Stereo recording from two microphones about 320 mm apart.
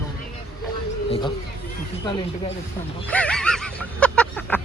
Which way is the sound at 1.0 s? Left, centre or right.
Centre.